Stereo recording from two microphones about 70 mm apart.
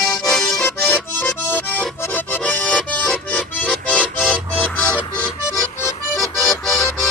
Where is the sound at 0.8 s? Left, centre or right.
Left; by 3.4 s centre.